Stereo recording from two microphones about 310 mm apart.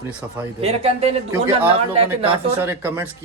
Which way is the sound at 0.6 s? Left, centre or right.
Centre.